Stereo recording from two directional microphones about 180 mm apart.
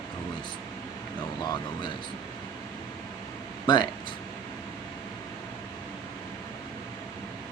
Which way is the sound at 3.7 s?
25° left (ahead or behind).